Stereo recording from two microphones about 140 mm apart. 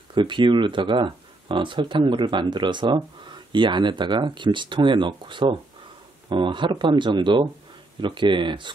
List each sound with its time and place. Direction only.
0.1 s speech: 35° right (ahead or behind)